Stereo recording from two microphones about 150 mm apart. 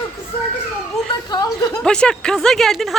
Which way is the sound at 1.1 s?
25° left (ahead or behind).